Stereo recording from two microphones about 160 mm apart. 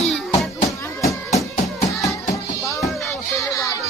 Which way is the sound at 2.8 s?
Centre (ahead or behind).